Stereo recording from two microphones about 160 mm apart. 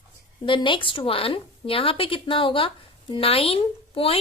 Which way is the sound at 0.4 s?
30° left (ahead or behind).